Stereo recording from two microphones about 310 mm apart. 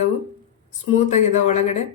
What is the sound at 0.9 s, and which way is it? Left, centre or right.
Speech, left.